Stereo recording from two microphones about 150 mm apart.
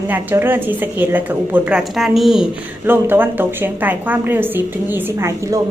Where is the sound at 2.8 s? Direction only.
15° right (ahead or behind).